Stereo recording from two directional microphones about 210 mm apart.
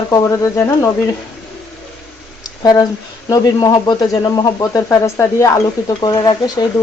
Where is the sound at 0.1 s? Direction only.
15° left (ahead or behind).